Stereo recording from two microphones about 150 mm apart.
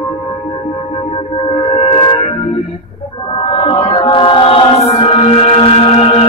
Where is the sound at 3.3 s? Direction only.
40° left (ahead or behind).